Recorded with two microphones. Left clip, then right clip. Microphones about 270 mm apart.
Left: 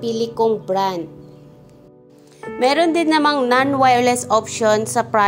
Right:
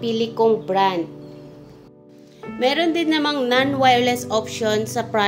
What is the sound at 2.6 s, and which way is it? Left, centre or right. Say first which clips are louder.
A woman's voice: left 3 dB; left.